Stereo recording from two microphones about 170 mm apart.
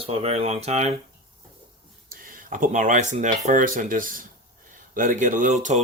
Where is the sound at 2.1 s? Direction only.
55° right (ahead or behind).